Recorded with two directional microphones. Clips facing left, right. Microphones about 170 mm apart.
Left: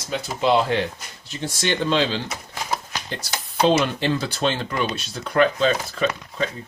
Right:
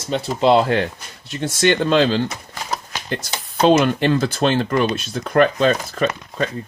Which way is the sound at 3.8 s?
55° right (ahead or behind).